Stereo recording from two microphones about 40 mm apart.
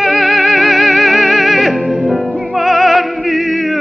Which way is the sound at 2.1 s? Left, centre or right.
Right.